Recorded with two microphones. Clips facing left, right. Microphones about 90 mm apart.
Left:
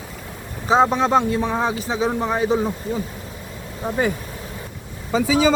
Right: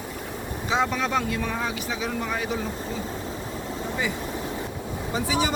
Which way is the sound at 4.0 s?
50° left (ahead or behind).